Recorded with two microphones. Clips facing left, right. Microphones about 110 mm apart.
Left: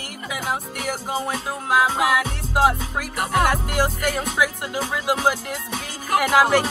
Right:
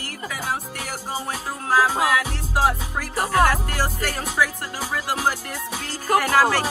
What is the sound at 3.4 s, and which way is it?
Music, 15° left (ahead or behind).